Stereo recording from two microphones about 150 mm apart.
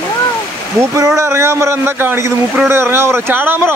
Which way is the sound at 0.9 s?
20° right (ahead or behind).